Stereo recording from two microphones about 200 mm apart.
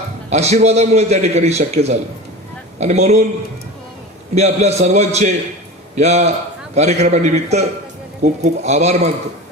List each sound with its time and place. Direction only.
0.3 s a man's voice: 35° right (ahead or behind)
4.4 s a man's voice: 35° right (ahead or behind)